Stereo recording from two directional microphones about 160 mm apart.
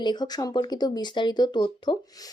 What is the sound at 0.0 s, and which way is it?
A woman's voice, 25° left (ahead or behind).